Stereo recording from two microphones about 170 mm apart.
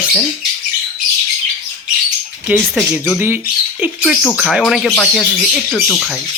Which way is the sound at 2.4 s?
5° right (ahead or behind).